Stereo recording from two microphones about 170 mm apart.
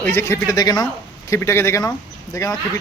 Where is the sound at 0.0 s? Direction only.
15° left (ahead or behind).